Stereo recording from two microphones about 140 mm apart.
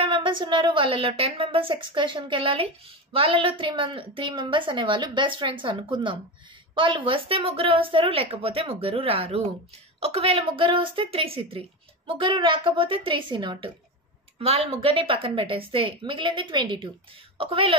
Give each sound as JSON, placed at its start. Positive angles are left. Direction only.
{"t": 0.0, "sound": "a woman's voice", "side_deg": -35}